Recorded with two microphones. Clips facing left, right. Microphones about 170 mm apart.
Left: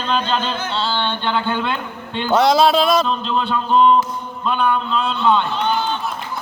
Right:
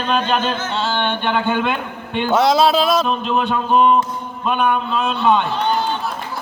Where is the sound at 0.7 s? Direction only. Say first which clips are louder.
Right 1 dB; 50° right (ahead or behind).